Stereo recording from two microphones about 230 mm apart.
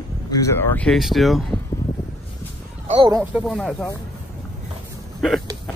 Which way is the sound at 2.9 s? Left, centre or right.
Right.